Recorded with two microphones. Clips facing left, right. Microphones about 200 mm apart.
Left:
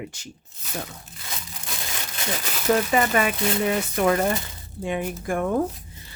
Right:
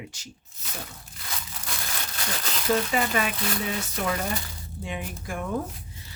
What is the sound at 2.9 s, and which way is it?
Speech, 50° left (ahead or behind).